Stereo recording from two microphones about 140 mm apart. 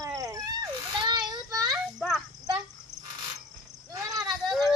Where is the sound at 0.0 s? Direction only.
25° right (ahead or behind).